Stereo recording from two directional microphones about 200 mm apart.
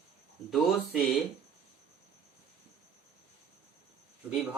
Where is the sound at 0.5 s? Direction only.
Centre (ahead or behind).